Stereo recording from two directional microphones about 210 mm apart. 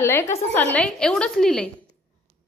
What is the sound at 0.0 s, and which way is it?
A woman's voice, 10° left (ahead or behind).